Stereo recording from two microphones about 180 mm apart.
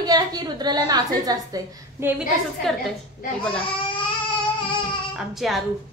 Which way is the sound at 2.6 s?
Centre (ahead or behind).